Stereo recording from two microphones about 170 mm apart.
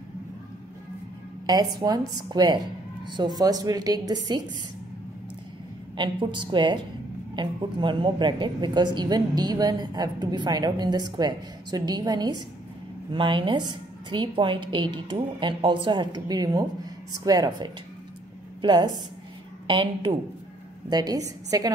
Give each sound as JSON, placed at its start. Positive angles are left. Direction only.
{"t": 1.4, "sound": "a woman's voice", "side_deg": -25}
{"t": 5.9, "sound": "a woman's voice", "side_deg": -30}